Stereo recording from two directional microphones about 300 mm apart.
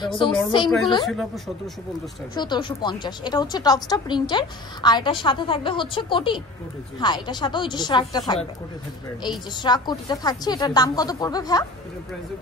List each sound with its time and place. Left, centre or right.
0.2 s a woman's voice: centre
1.0 s speech: centre
2.3 s a woman's voice: centre